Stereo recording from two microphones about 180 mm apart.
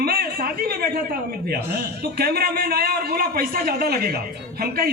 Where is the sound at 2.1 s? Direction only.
60° right (ahead or behind).